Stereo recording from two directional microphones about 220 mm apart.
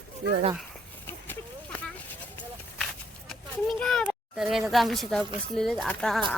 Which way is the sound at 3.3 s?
Centre (ahead or behind).